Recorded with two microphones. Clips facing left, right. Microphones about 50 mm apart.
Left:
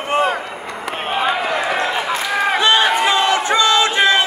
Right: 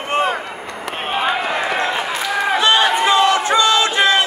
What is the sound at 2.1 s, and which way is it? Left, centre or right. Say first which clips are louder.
Run: left 1 dB; centre.